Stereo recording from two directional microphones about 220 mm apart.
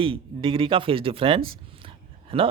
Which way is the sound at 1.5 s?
25° right (ahead or behind).